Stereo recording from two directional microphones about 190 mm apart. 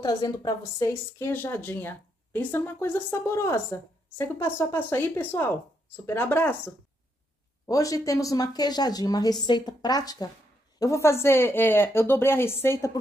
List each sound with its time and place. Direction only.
0.0 s a woman's voice: 20° left (ahead or behind)